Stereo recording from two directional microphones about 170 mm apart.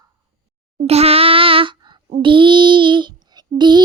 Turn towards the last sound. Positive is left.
turn(degrees=-25)  # may be behind; listen again after turning